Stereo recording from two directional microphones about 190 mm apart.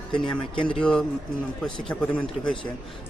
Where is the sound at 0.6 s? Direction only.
5° left (ahead or behind).